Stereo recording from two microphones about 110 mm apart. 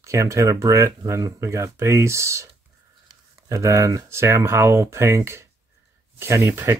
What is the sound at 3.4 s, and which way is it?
Speech, 30° right (ahead or behind).